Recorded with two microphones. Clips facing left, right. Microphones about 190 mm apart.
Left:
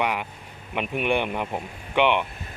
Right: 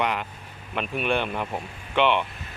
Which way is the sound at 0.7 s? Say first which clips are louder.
Left 1 dB; 15° left (ahead or behind).